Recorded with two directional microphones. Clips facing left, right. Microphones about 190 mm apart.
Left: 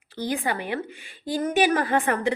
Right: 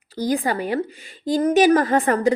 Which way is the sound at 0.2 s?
40° right (ahead or behind).